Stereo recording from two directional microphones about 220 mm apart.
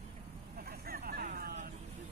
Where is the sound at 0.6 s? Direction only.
45° right (ahead or behind).